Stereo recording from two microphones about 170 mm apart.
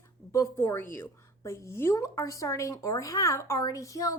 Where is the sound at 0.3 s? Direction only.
15° left (ahead or behind).